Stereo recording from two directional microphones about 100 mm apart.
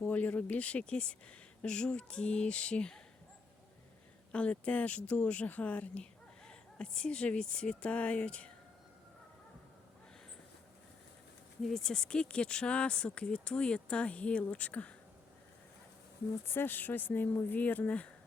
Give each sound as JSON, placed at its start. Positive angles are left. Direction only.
{"t": 0.0, "sound": "speech", "side_deg": 15}
{"t": 4.3, "sound": "speech", "side_deg": 10}
{"t": 11.6, "sound": "speech", "side_deg": 5}
{"t": 16.6, "sound": "speech", "side_deg": 20}